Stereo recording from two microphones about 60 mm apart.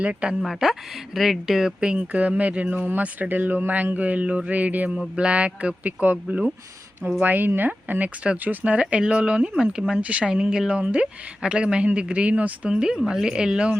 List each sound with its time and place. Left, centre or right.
0.0 s speech: right
0.4 s speech: centre
1.8 s speech: right
12.7 s speech: centre